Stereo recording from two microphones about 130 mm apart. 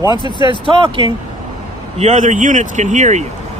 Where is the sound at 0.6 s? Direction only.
45° right (ahead or behind).